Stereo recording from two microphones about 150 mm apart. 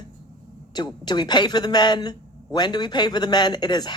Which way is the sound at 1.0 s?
30° left (ahead or behind).